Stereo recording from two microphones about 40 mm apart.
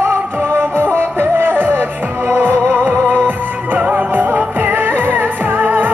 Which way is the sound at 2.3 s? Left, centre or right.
Right.